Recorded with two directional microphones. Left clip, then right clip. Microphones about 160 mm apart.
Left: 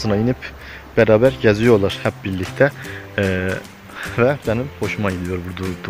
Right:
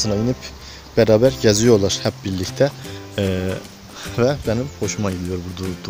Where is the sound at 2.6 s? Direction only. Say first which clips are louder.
Left 3 dB; 20° right (ahead or behind).